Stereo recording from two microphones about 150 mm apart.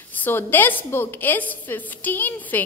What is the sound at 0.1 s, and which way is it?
A woman's voice, 15° left (ahead or behind).